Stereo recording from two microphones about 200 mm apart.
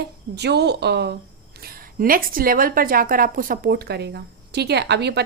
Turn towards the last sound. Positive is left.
turn(degrees=-55)  # may be behind; listen again after turning